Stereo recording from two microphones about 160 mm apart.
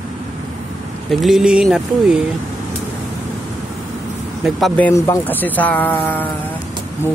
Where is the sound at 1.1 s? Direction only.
Centre (ahead or behind).